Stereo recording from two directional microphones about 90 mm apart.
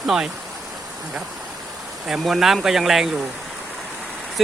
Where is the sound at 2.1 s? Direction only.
5° right (ahead or behind).